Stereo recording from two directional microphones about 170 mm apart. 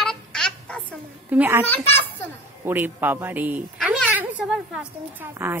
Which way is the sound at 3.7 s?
10° right (ahead or behind).